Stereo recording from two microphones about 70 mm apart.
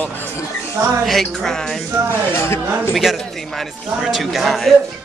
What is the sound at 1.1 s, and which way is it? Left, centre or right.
Music, centre.